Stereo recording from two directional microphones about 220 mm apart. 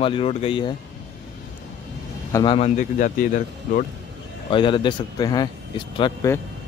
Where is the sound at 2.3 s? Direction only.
25° left (ahead or behind).